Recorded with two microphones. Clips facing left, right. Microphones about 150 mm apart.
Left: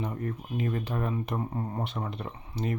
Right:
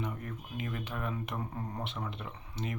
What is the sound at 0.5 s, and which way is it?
Speech, 35° left (ahead or behind).